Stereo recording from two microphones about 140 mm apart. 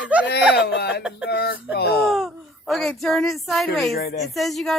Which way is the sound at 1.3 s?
90° left.